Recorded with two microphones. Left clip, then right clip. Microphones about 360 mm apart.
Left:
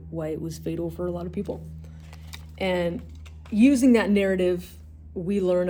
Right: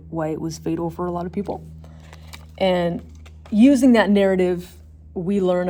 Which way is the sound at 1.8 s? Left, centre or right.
Centre.